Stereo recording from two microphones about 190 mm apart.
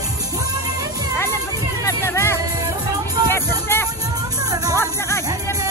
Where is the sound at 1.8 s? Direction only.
15° left (ahead or behind).